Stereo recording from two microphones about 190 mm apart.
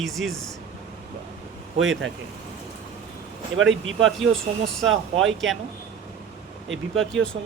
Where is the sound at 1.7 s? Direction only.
80° right.